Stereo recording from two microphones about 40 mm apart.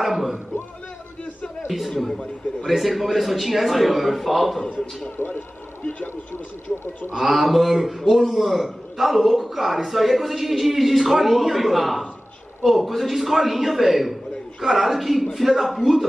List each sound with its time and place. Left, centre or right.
0.0 s a sound: centre
1.9 s a man's voice: centre
5.1 s speech: left
6.3 s speech: left
7.2 s a man's voice: centre